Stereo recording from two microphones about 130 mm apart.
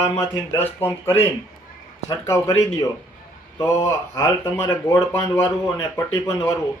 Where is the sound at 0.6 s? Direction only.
15° left (ahead or behind).